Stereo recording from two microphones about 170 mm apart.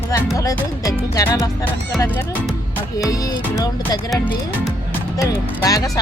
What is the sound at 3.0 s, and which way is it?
Speech, 20° left (ahead or behind).